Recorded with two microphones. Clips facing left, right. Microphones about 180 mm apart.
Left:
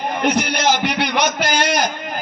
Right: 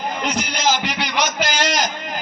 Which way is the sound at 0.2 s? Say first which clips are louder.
Left 8 dB; 60° left (ahead or behind).